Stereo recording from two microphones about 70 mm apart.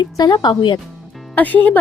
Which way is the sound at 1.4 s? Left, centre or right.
Left.